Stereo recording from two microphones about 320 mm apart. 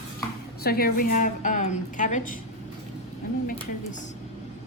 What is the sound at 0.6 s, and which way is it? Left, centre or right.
A woman's voice, left.